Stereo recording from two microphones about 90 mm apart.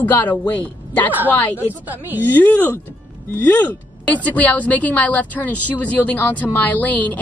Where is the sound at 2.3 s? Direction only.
20° left (ahead or behind).